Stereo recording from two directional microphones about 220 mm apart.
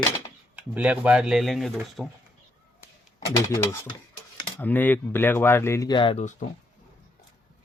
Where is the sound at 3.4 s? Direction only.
15° left (ahead or behind).